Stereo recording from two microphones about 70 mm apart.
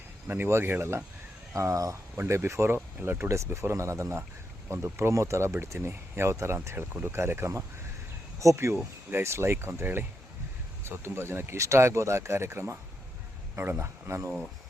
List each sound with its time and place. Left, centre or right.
0.3 s speech: right
1.5 s speech: right
2.1 s speech: right
6.9 s speech: right
7.2 s speech: right